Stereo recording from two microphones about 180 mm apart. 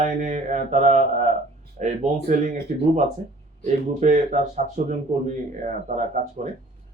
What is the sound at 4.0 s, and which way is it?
A man's voice, 40° right (ahead or behind).